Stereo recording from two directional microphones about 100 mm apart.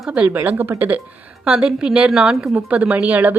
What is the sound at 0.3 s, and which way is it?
Speech, 20° right (ahead or behind).